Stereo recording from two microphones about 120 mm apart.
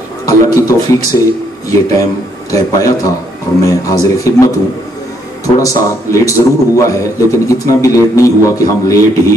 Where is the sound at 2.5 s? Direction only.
30° left (ahead or behind).